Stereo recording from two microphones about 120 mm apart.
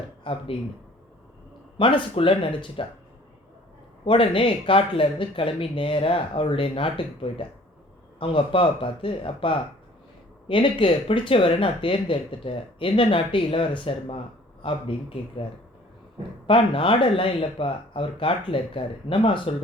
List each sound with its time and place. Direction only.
0.3 s speech: 45° left (ahead or behind)
1.8 s speech: 45° left (ahead or behind)
4.0 s speech: 50° left (ahead or behind)
16.5 s speech: 45° left (ahead or behind)